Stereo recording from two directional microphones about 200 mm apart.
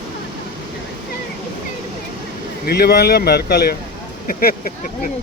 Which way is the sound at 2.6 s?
55° left (ahead or behind).